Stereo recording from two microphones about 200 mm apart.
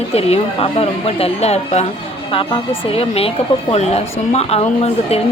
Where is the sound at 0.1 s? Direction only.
30° left (ahead or behind).